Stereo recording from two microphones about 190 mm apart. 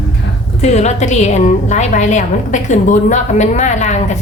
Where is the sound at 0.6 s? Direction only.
35° left (ahead or behind).